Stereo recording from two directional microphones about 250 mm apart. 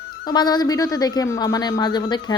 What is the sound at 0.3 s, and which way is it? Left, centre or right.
Speech, centre.